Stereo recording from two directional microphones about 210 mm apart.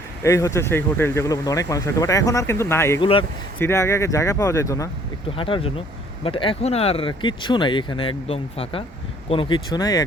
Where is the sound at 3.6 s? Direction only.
10° left (ahead or behind).